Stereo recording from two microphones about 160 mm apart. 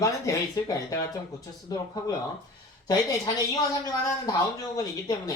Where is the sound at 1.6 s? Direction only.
25° left (ahead or behind).